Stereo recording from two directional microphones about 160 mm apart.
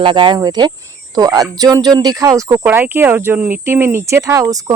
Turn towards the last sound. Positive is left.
turn(degrees=-20)  # may be behind; listen again after turning